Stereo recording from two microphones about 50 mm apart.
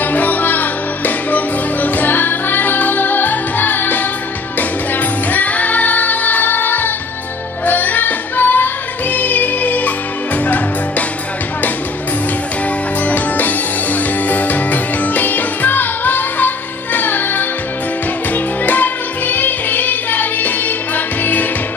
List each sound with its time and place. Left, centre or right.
0.0 s music: left
13.0 s music: left